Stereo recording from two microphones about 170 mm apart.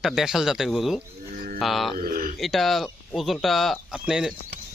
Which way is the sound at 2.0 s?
60° right (ahead or behind).